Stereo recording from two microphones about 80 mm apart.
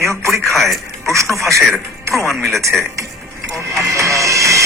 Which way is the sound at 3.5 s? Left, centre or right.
Right.